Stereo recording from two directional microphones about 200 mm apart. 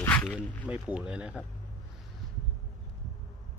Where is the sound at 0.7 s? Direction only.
5° right (ahead or behind).